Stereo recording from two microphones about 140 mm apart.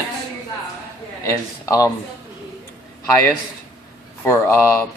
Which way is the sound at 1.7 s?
25° left (ahead or behind).